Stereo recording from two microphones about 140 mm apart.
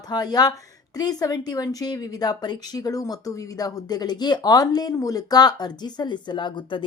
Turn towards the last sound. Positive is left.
turn(degrees=35)  # may be behind; listen again after turning